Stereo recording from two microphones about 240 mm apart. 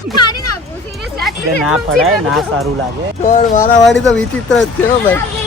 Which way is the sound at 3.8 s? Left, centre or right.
Centre.